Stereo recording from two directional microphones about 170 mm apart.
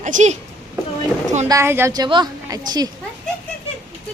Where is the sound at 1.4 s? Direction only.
15° right (ahead or behind).